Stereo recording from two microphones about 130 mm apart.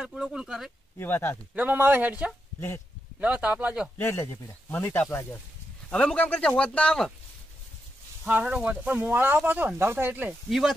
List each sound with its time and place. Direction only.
0.0 s speech: 5° right (ahead or behind)
0.9 s speech: 15° left (ahead or behind)
1.5 s speech: 15° right (ahead or behind)
4.0 s speech: 20° left (ahead or behind)
8.2 s speech: 10° right (ahead or behind)